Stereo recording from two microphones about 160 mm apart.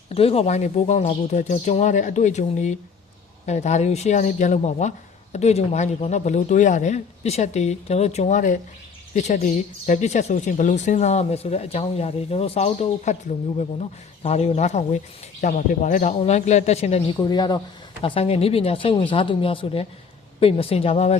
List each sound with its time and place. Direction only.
0.1 s speech: 40° left (ahead or behind)
17.2 s speech: 25° left (ahead or behind)